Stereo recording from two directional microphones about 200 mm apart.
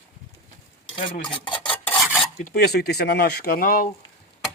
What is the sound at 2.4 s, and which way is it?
Speech, 50° left (ahead or behind).